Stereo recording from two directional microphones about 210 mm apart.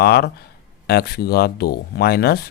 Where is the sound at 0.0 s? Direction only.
50° left (ahead or behind).